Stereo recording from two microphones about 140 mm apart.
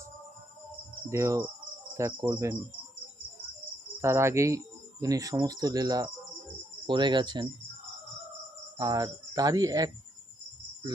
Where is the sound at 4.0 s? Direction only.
20° right (ahead or behind).